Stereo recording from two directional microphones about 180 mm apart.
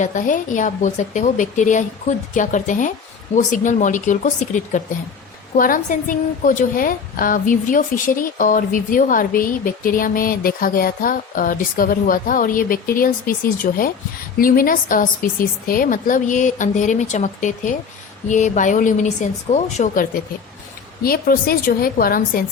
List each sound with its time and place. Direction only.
0.0 s a woman's voice: 45° left (ahead or behind)
21.0 s a woman's voice: 55° left (ahead or behind)